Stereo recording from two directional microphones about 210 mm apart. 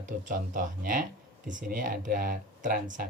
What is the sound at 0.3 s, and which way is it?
Speech, 40° right (ahead or behind).